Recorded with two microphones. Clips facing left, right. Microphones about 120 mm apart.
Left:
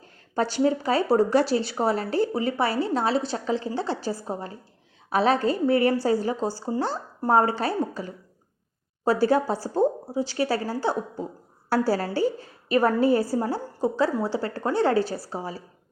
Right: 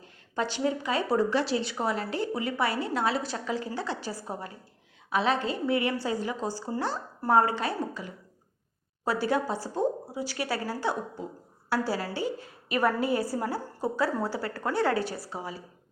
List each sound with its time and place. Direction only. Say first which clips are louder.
0.3 s a woman's voice: left 6 dB; 40° left (ahead or behind)
5.0 s a woman's voice: left 5 dB; 40° left (ahead or behind)
11.7 s a woman's voice: left 6 dB; 40° left (ahead or behind)